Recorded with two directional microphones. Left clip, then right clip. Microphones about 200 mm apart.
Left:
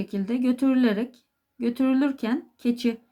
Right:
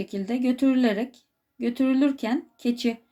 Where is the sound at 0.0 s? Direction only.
20° left (ahead or behind).